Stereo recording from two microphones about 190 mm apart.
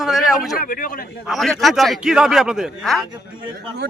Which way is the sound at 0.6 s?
45° left (ahead or behind).